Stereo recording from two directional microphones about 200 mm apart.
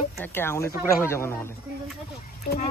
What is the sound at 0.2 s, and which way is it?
Speech, 10° left (ahead or behind).